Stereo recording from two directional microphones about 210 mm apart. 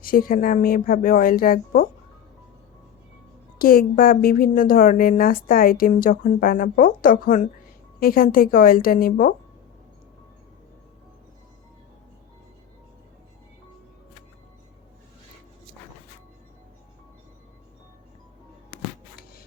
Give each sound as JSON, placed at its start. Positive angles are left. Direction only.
{"t": 0.0, "sound": "a woman's voice", "side_deg": 45}
{"t": 3.6, "sound": "a woman's voice", "side_deg": 45}